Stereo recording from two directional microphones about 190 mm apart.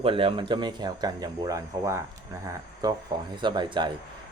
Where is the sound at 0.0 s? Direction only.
30° right (ahead or behind).